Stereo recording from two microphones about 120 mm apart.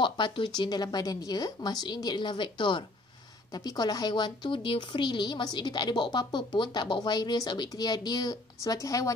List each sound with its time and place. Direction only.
0.0 s speech: 40° left (ahead or behind)